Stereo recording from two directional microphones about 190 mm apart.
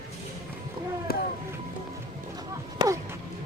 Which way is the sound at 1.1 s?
50° left (ahead or behind).